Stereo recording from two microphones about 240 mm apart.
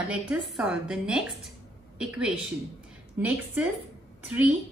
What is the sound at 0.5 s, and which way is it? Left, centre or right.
A woman's voice, centre.